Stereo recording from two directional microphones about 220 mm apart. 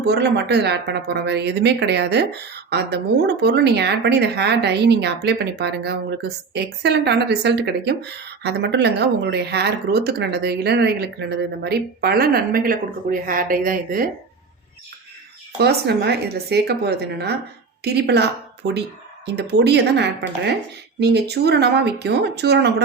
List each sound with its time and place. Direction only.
0.0 s a woman's voice: 50° right (ahead or behind)
15.5 s a woman's voice: 50° right (ahead or behind)